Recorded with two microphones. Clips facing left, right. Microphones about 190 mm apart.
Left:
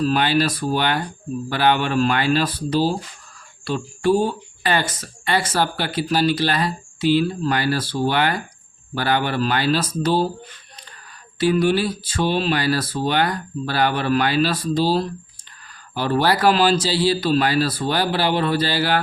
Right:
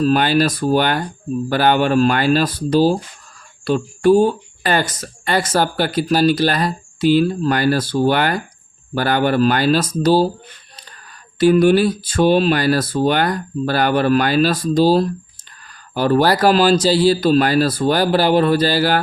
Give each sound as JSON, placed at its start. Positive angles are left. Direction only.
{"t": 0.0, "sound": "speech", "side_deg": -45}
{"t": 11.3, "sound": "speech", "side_deg": -45}